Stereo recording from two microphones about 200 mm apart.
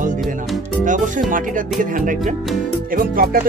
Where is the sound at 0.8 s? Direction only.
40° right (ahead or behind).